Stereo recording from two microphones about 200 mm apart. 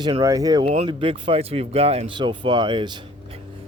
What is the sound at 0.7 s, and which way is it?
Speech, 30° right (ahead or behind).